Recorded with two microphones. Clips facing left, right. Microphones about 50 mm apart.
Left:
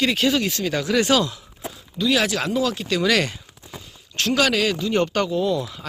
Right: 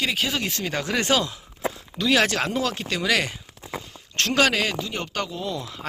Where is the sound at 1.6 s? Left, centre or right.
Right.